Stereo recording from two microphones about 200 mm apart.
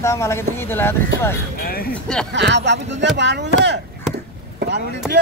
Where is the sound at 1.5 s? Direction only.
50° left (ahead or behind).